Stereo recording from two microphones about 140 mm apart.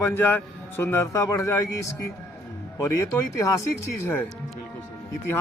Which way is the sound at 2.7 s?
20° left (ahead or behind).